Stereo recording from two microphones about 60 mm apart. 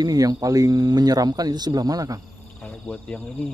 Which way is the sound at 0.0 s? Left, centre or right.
Right.